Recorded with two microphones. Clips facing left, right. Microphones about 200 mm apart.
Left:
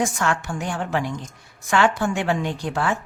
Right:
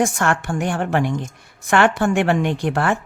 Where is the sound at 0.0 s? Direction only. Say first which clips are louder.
Right 4 dB; 50° right (ahead or behind).